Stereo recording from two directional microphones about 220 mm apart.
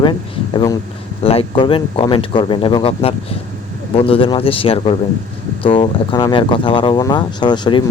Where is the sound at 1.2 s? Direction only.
25° left (ahead or behind).